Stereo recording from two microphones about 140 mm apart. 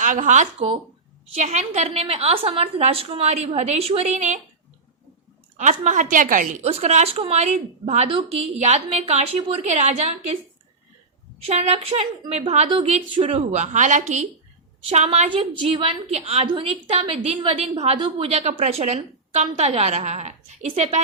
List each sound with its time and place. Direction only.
0.0 s a woman's voice: 65° right (ahead or behind)
5.5 s a woman's voice: 60° right (ahead or behind)
6.6 s a woman's voice: 45° right (ahead or behind)
11.4 s a woman's voice: 50° right (ahead or behind)
15.3 s a woman's voice: 40° right (ahead or behind)
17.9 s a woman's voice: 35° right (ahead or behind)
18.3 s a woman's voice: 50° right (ahead or behind)